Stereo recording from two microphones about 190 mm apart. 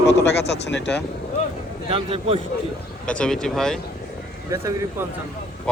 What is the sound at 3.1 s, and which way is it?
Speech, 5° left (ahead or behind).